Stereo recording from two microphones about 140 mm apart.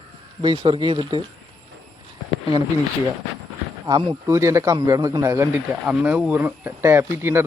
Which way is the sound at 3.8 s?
30° right (ahead or behind).